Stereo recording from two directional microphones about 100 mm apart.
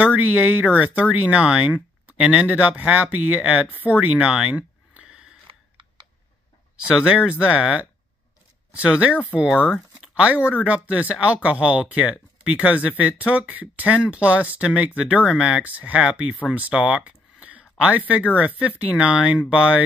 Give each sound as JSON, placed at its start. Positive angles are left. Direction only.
{"t": 0.0, "sound": "speech", "side_deg": -15}
{"t": 3.8, "sound": "a sound", "side_deg": -15}
{"t": 5.5, "sound": "typing", "side_deg": -55}
{"t": 6.8, "sound": "speech", "side_deg": -5}
{"t": 9.6, "sound": "speech", "side_deg": 15}
{"t": 10.1, "sound": "speech", "side_deg": -10}